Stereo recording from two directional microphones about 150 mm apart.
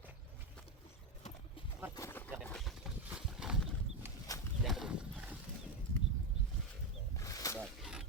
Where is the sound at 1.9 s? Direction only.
15° left (ahead or behind).